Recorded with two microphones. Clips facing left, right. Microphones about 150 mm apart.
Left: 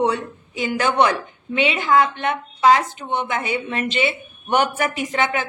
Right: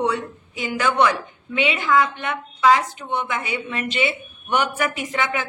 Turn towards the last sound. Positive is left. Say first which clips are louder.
# left 3 dB
turn(degrees=30)  # may be behind; listen again after turning